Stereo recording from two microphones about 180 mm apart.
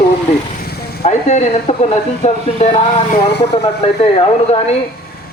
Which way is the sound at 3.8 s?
35° left (ahead or behind).